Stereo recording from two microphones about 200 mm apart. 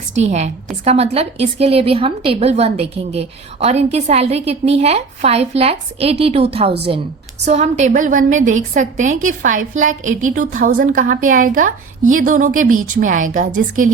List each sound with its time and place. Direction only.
0.2 s a woman's voice: 35° right (ahead or behind)